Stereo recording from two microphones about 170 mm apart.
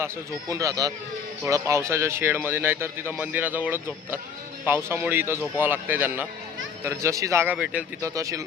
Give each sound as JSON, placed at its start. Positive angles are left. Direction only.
{"t": 0.0, "sound": "speech", "side_deg": -20}
{"t": 8.0, "sound": "speech", "side_deg": -20}